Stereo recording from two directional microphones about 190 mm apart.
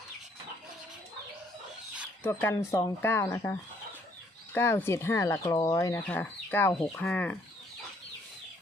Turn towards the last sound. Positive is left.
turn(degrees=10)  # may be behind; listen again after turning